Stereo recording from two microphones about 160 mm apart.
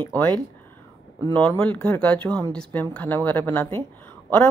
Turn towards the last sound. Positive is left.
turn(degrees=10)  # may be behind; listen again after turning